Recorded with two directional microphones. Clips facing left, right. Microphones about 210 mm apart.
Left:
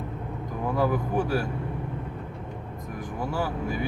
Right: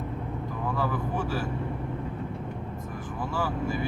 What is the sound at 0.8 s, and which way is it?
Speech, 15° left (ahead or behind).